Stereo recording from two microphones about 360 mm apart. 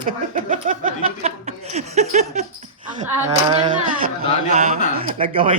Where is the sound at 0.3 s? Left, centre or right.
Right.